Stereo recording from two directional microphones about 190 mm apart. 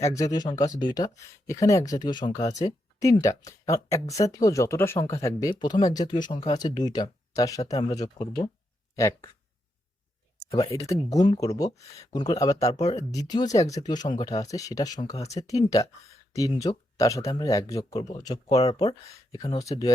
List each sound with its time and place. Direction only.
0.0 s speech: 15° left (ahead or behind)
9.0 s speech: 15° left (ahead or behind)
10.7 s speech: 15° left (ahead or behind)